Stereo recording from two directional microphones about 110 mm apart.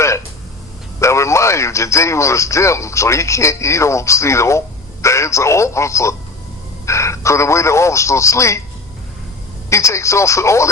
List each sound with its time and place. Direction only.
0.9 s speech: 25° left (ahead or behind)
9.6 s speech: 25° left (ahead or behind)